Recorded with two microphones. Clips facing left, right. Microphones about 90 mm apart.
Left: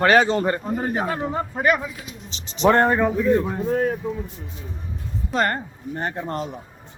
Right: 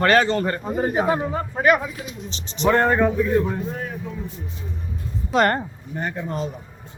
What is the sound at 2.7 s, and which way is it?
Speech, 25° left (ahead or behind).